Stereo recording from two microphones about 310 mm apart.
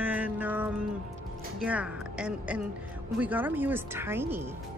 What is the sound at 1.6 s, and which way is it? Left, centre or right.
A woman's voice, centre.